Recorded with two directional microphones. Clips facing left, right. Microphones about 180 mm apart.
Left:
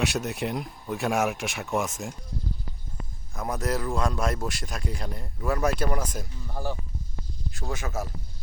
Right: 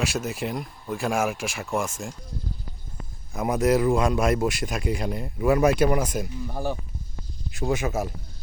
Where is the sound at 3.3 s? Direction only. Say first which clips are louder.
Right 8 dB; 15° right (ahead or behind).